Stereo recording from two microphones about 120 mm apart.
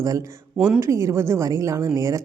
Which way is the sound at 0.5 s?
10° right (ahead or behind).